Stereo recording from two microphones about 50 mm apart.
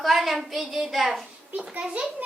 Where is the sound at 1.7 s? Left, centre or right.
Right.